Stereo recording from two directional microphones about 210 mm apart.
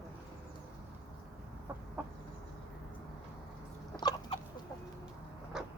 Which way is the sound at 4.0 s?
20° left (ahead or behind).